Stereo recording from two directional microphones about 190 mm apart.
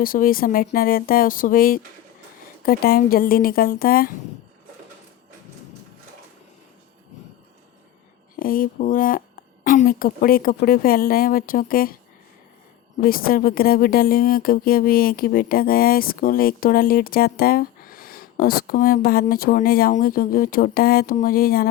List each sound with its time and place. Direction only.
0.0 s speech: 50° left (ahead or behind)
8.4 s speech: 50° left (ahead or behind)
13.0 s speech: 50° left (ahead or behind)